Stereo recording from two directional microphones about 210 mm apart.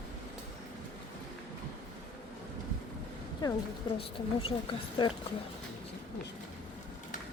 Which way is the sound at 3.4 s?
20° left (ahead or behind).